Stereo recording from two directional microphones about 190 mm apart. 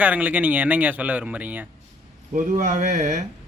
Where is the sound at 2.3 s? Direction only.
40° right (ahead or behind).